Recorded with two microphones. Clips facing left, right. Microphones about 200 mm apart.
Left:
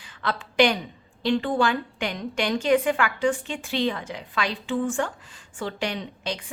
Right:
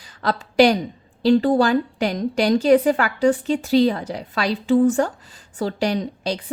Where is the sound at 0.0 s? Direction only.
40° right (ahead or behind).